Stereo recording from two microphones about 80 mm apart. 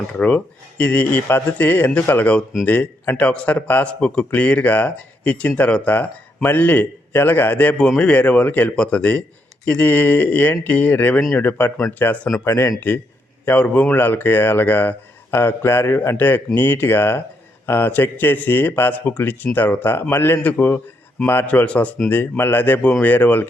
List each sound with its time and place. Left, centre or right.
0.1 s speech: centre
12.5 s a man's voice: left
13.4 s speech: left